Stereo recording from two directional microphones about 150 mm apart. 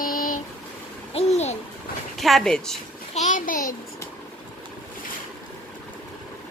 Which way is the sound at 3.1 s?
55° left (ahead or behind).